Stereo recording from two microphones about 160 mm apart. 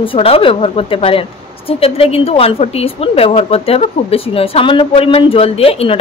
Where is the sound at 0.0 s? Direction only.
35° left (ahead or behind).